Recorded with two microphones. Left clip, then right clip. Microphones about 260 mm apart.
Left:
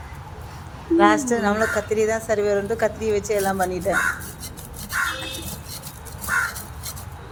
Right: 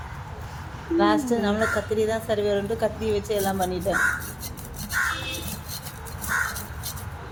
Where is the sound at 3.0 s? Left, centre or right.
Left.